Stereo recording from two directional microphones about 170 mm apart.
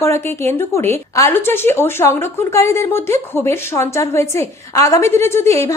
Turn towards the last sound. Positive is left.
turn(degrees=15)  # may be behind; listen again after turning